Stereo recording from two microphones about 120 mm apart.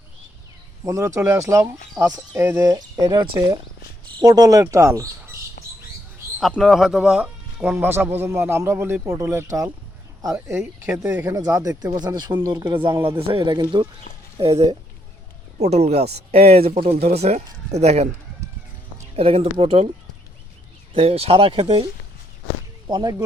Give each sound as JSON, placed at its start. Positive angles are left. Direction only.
{"t": 0.9, "sound": "speech", "side_deg": -25}
{"t": 2.0, "sound": "speech", "side_deg": -30}
{"t": 6.6, "sound": "speech", "side_deg": 0}
{"t": 15.5, "sound": "speech", "side_deg": -65}
{"t": 20.9, "sound": "speech", "side_deg": -55}
{"t": 22.9, "sound": "speech", "side_deg": -40}